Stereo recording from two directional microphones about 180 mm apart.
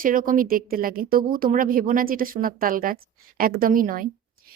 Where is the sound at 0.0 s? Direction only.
50° right (ahead or behind).